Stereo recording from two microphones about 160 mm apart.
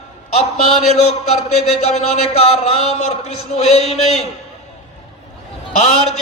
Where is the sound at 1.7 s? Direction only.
40° left (ahead or behind).